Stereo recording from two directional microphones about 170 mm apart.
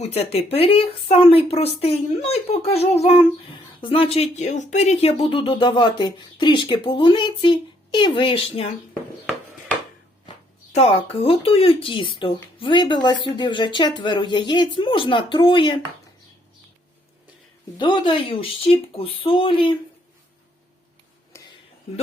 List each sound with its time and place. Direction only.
0.0 s speech: 35° left (ahead or behind)
10.7 s speech: 35° left (ahead or behind)
17.7 s speech: 30° left (ahead or behind)